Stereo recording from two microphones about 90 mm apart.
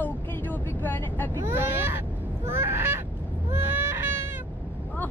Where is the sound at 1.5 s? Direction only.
25° right (ahead or behind).